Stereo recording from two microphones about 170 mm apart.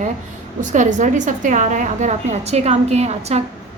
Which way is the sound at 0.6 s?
45° right (ahead or behind).